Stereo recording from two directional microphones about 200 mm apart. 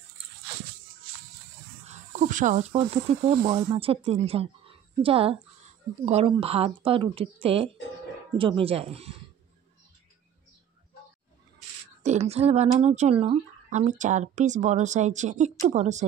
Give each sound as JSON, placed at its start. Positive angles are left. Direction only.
{"t": 1.9, "sound": "speech", "side_deg": -40}
{"t": 12.0, "sound": "speech", "side_deg": -35}